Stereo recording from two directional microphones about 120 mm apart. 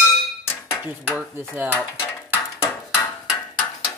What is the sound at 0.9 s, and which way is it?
Dishes, 15° right (ahead or behind).